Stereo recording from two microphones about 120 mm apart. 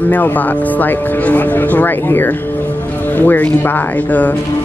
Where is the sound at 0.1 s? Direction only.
15° left (ahead or behind).